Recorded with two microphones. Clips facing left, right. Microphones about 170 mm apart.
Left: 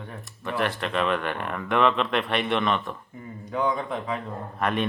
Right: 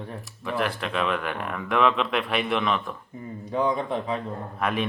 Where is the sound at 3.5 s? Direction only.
30° right (ahead or behind).